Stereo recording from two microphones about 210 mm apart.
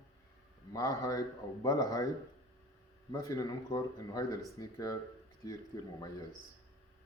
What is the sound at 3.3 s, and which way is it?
Speech, 15° left (ahead or behind).